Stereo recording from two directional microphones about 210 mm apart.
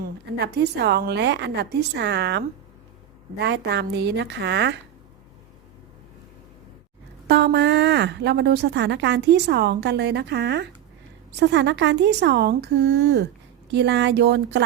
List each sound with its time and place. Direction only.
0.0 s speech: 50° right (ahead or behind)
7.3 s speech: 50° right (ahead or behind)